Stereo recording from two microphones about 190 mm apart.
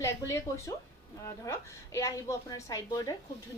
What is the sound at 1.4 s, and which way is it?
A woman's voice, 15° left (ahead or behind).